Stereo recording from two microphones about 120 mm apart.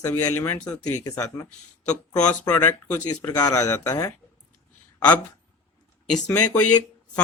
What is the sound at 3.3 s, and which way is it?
Speech, 30° left (ahead or behind).